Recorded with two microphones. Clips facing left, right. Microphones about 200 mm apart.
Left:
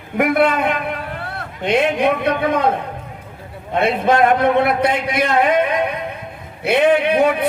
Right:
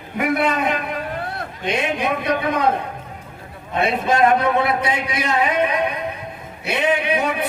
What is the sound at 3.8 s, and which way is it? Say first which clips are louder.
A man's voice: left 2 dB; 55° left (ahead or behind).